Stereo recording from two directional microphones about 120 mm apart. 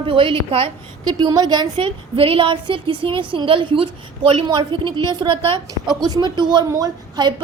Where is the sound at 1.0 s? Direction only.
35° right (ahead or behind).